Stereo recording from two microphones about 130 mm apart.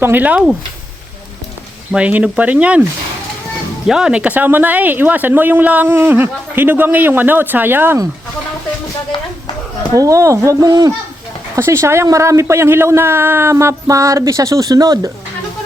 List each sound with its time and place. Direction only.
0.0 s speech: 15° right (ahead or behind)
1.9 s speech: 10° right (ahead or behind)
3.8 s speech: 5° right (ahead or behind)
9.9 s speech: 25° right (ahead or behind)